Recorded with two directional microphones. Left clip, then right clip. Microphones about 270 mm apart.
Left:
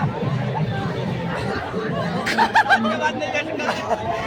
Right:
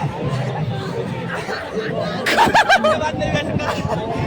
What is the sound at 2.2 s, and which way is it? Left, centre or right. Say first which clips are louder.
Snicker: right 4 dB; right.